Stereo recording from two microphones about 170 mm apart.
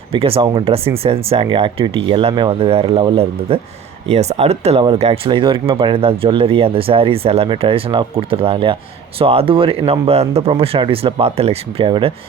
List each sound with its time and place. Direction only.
0.1 s speech: 35° right (ahead or behind)